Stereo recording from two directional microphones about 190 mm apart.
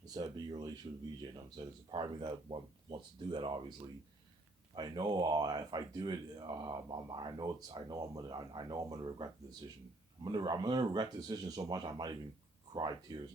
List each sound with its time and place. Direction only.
0.0 s speech: 20° right (ahead or behind)